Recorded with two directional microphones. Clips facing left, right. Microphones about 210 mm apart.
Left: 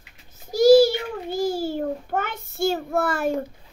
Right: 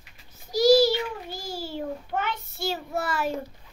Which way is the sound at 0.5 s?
50° left (ahead or behind).